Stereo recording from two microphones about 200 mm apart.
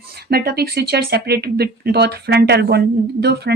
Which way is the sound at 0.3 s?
50° right (ahead or behind).